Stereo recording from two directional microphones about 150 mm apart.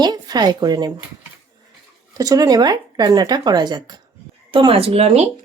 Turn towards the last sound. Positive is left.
turn(degrees=-45)  # may be behind; listen again after turning